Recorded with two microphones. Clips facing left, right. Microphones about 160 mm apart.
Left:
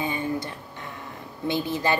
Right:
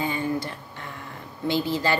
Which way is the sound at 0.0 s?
20° left (ahead or behind).